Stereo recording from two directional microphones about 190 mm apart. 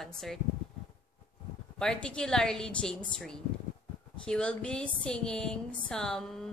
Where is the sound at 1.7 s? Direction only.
5° left (ahead or behind).